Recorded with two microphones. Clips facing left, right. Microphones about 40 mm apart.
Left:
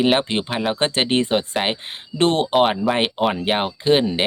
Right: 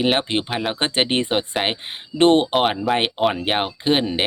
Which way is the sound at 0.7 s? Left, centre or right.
Centre.